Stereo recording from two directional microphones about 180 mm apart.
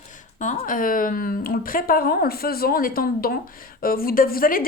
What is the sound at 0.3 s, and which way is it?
A woman's voice, 45° left (ahead or behind).